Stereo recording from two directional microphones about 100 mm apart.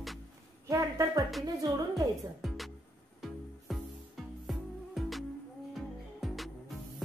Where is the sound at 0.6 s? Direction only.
30° right (ahead or behind).